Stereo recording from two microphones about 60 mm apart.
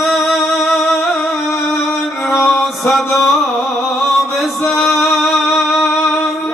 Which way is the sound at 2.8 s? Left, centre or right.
Left.